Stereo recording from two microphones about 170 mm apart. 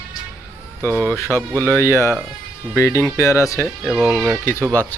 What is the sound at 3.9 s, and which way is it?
Speech, centre (ahead or behind).